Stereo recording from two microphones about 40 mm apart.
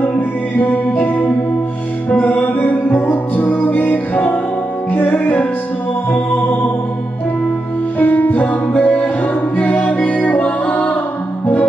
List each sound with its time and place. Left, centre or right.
0.6 s music: left
8.0 s music: left